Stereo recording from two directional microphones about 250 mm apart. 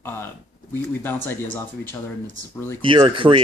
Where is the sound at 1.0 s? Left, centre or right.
Centre.